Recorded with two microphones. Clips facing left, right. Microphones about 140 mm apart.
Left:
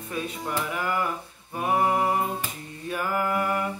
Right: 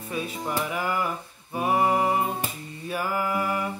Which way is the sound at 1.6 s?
5° right (ahead or behind).